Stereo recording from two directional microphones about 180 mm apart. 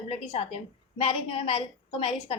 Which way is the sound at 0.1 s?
35° left (ahead or behind).